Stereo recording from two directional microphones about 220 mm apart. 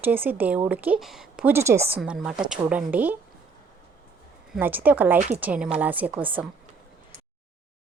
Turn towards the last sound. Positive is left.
turn(degrees=-5)  # may be behind; listen again after turning